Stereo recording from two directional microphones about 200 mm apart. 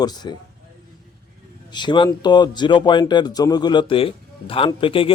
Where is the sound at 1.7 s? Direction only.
25° left (ahead or behind).